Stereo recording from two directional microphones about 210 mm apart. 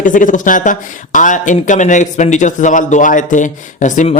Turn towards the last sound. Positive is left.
turn(degrees=35)  # may be behind; listen again after turning